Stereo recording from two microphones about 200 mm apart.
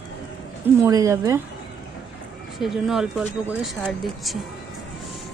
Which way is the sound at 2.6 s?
Centre (ahead or behind).